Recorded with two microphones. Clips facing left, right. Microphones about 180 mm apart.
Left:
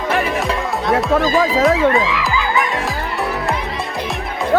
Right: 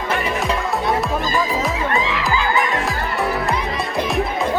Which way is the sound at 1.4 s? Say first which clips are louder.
Left 6 dB; 90° left.